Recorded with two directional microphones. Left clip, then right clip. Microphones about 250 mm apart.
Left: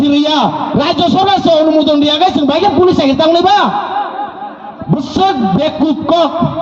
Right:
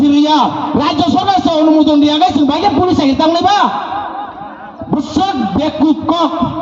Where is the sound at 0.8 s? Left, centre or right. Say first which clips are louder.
Left 2 dB; left.